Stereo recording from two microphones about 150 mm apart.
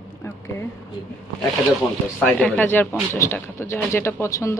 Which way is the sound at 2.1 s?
10° left (ahead or behind).